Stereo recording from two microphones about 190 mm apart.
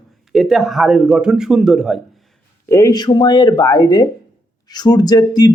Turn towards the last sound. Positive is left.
turn(degrees=20)  # may be behind; listen again after turning